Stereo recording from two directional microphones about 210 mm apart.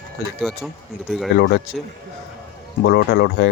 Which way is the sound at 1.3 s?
50° left (ahead or behind).